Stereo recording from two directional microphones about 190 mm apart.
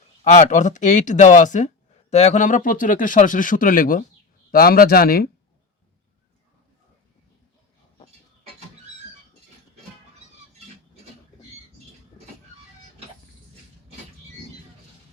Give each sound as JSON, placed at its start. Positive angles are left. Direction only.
{"t": 0.3, "sound": "speech", "side_deg": 40}